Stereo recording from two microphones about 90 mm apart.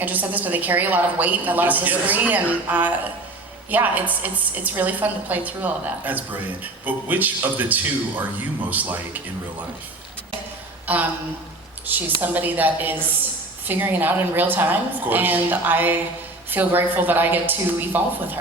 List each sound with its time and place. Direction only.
0.0 s a woman's voice: 20° right (ahead or behind)
10.9 s a woman's voice: 20° right (ahead or behind)